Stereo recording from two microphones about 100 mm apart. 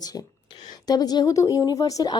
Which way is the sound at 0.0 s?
40° left (ahead or behind).